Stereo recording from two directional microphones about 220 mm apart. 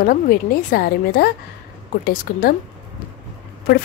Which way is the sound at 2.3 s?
40° left (ahead or behind).